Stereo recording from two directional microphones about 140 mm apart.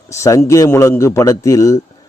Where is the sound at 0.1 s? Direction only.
20° left (ahead or behind).